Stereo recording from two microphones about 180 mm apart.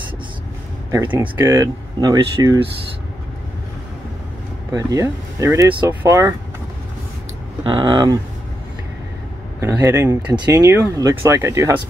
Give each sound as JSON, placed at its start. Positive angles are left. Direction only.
{"t": 0.9, "sound": "speech", "side_deg": -10}
{"t": 4.7, "sound": "speech", "side_deg": -20}
{"t": 7.6, "sound": "speech", "side_deg": -25}
{"t": 9.6, "sound": "speech", "side_deg": -15}